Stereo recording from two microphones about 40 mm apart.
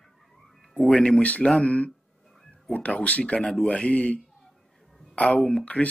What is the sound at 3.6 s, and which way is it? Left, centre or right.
Speech, left.